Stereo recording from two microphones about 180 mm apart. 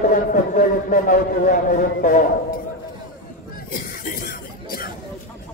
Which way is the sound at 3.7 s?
50° left (ahead or behind).